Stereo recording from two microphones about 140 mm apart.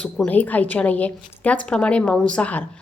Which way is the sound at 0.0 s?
10° left (ahead or behind).